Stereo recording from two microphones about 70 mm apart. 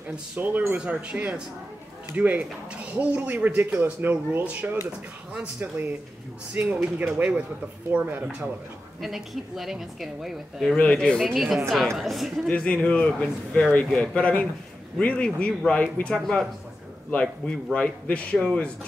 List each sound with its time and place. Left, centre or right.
0.4 s speech: right
9.0 s a woman's voice: centre
10.8 s speech: centre
11.3 s a woman's voice: centre
12.4 s a man's voice: centre